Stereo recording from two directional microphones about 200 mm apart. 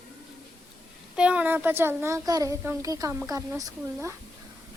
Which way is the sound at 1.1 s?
5° right (ahead or behind).